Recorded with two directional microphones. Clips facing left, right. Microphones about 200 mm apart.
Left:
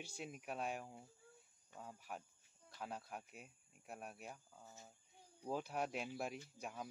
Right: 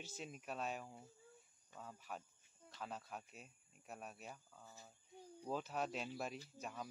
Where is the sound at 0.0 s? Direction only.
15° left (ahead or behind).